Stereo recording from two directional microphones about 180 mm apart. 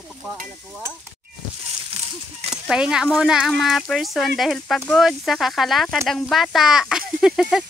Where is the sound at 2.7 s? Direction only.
5° right (ahead or behind).